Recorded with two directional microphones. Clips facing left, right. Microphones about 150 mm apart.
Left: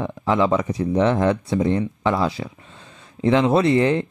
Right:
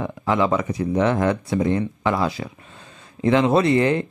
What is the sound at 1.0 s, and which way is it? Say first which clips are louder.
Speech: left 1 dB; 25° left (ahead or behind).